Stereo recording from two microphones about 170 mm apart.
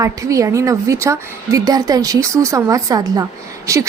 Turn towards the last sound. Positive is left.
turn(degrees=-20)  # may be behind; listen again after turning